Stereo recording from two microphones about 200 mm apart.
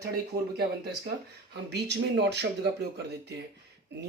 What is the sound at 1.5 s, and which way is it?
Speech, 55° right (ahead or behind).